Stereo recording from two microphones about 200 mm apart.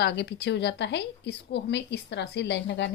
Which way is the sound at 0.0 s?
55° left (ahead or behind).